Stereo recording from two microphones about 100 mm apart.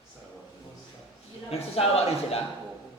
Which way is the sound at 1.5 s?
85° left.